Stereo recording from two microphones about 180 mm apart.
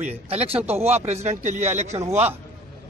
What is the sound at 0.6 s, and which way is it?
Speech, 10° right (ahead or behind).